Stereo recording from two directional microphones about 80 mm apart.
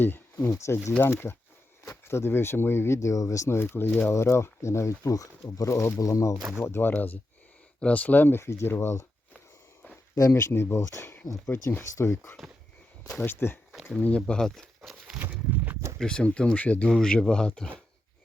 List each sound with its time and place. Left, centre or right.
0.3 s speech: left
3.6 s speech: left
6.6 s speech: left
10.2 s speech: left
14.3 s speech: centre
14.8 s walk: centre
15.2 s a sound: right
16.0 s speech: centre